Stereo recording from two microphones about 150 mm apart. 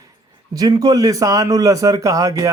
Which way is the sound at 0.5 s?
25° right (ahead or behind).